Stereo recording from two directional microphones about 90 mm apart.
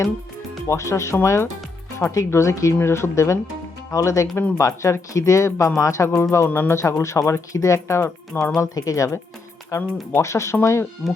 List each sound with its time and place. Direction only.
0.7 s speech: 35° left (ahead or behind)